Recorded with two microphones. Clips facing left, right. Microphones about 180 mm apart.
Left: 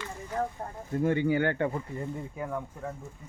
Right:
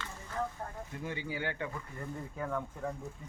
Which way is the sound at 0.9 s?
50° left (ahead or behind).